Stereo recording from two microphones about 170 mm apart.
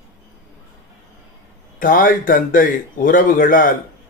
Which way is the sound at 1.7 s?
55° left (ahead or behind).